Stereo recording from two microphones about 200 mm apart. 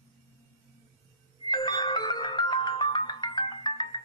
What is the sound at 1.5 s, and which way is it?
Music, 20° left (ahead or behind).